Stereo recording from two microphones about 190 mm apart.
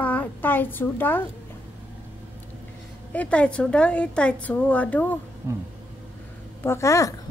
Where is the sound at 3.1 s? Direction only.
5° left (ahead or behind).